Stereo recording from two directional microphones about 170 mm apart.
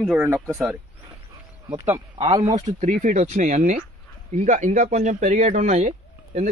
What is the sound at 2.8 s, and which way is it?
Speech, 45° right (ahead or behind).